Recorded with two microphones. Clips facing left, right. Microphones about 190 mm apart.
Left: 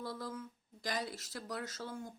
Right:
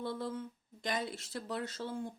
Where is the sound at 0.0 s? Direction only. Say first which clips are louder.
Right 4 dB; 25° right (ahead or behind).